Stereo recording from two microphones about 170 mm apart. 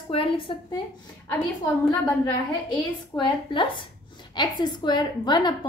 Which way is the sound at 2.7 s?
25° left (ahead or behind).